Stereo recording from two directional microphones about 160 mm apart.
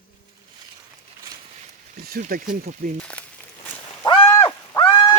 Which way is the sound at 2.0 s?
70° right (ahead or behind).